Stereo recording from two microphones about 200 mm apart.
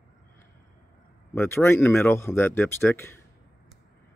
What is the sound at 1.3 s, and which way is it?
Speech, 10° left (ahead or behind).